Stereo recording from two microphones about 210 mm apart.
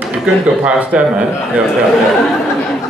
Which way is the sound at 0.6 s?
5° right (ahead or behind).